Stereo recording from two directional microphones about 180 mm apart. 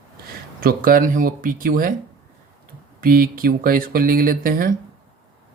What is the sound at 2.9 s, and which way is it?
Speech, 50° right (ahead or behind).